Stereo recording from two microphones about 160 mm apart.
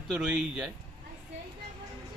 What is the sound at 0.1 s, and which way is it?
Speech, 5° right (ahead or behind).